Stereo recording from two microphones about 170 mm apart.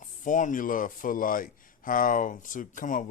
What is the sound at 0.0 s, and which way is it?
Speech, 50° left (ahead or behind).